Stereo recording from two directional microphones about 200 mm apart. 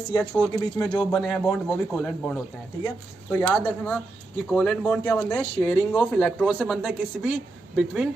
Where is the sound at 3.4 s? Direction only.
10° left (ahead or behind).